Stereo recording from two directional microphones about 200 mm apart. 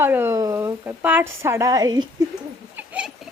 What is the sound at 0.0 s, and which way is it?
Speech, 10° right (ahead or behind).